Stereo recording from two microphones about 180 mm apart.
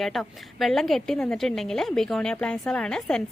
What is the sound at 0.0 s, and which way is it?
Speech, centre (ahead or behind).